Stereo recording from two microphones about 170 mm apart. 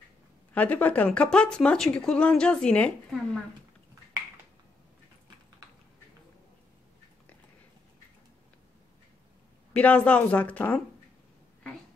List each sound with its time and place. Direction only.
0.6 s speech: 10° left (ahead or behind)
9.8 s speech: 10° left (ahead or behind)